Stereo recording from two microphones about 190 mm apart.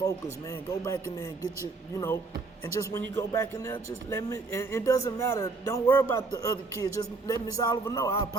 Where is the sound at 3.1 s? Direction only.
15° left (ahead or behind).